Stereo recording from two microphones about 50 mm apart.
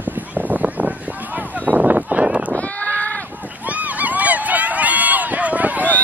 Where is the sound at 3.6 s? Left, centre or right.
Right.